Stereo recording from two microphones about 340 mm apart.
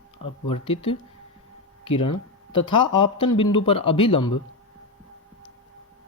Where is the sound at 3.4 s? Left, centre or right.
Centre.